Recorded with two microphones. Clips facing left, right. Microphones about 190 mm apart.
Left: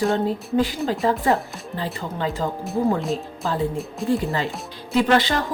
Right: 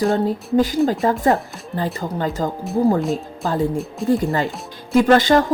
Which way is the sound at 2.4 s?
40° right (ahead or behind).